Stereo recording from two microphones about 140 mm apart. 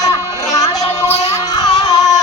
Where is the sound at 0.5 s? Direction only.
25° left (ahead or behind).